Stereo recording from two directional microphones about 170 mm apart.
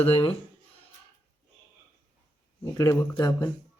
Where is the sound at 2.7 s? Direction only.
20° left (ahead or behind).